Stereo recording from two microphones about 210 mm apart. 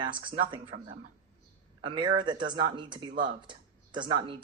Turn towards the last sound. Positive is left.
turn(degrees=-20)  # may be behind; listen again after turning